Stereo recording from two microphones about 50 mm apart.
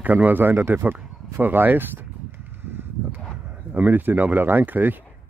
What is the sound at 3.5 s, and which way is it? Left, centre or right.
Speech, right.